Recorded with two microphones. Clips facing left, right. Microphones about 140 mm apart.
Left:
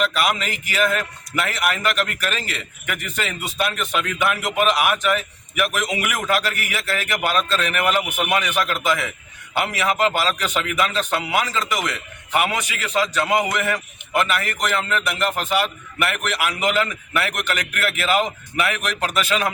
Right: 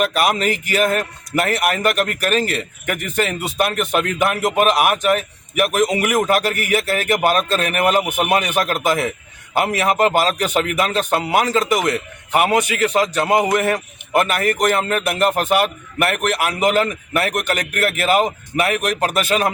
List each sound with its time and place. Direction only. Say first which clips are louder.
0.0 s a man's voice: right 4 dB; 45° right (ahead or behind)